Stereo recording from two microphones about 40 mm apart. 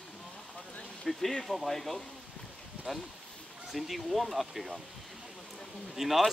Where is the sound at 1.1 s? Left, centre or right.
Centre.